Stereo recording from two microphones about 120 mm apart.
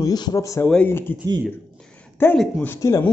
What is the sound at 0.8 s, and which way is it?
Speech, 20° left (ahead or behind).